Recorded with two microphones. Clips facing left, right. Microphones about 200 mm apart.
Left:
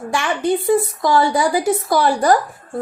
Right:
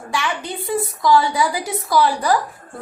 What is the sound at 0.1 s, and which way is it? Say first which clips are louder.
A woman's voice: left 6 dB; 50° left (ahead or behind).